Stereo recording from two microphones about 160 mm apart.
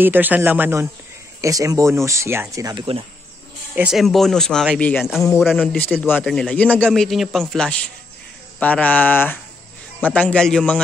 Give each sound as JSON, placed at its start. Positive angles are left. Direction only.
{"t": 0.0, "sound": "speech", "side_deg": -10}
{"t": 3.7, "sound": "a man's voice", "side_deg": -5}